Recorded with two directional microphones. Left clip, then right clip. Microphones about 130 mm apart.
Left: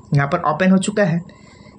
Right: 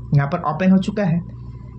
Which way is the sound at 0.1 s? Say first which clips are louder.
Left 4 dB; 30° left (ahead or behind).